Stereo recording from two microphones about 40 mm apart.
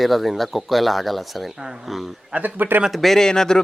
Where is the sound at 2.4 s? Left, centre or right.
Right.